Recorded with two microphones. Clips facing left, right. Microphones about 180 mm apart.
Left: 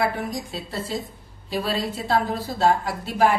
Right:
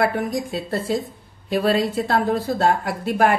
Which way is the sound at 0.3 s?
55° right (ahead or behind).